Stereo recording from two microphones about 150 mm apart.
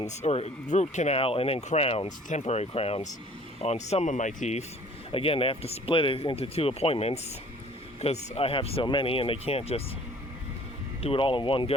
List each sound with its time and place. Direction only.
0.0 s speech: 50° left (ahead or behind)
5.1 s speech: 40° left (ahead or behind)
11.0 s speech: 35° left (ahead or behind)